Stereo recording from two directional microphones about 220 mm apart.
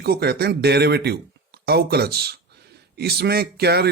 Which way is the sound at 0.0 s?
45° right (ahead or behind).